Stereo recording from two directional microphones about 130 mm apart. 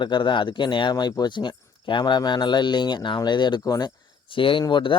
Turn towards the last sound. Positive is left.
turn(degrees=35)  # may be behind; listen again after turning